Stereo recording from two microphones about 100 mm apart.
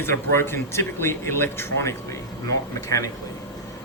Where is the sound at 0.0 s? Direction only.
25° left (ahead or behind).